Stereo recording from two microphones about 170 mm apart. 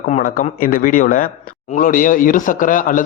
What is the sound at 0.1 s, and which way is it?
A man's voice, 50° left (ahead or behind).